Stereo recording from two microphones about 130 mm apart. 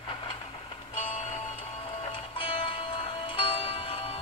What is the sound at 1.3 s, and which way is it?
Music, 45° left (ahead or behind).